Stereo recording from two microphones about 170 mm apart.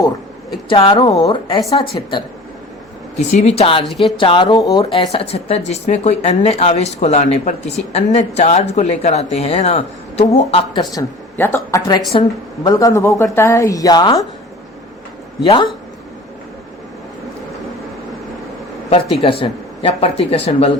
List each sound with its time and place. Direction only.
0.7 s speech: 35° left (ahead or behind)
3.8 s speech: centre (ahead or behind)
4.2 s speech: 30° left (ahead or behind)
11.0 s speech: 20° left (ahead or behind)
11.3 s speech: 10° left (ahead or behind)
15.4 s speech: 30° left (ahead or behind)
19.4 s speech: 35° left (ahead or behind)